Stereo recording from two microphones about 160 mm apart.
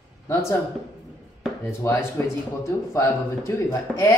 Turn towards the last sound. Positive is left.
turn(degrees=15)  # may be behind; listen again after turning